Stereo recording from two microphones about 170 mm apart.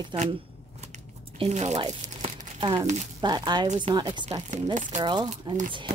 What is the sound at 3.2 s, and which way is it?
A woman's voice, 25° right (ahead or behind).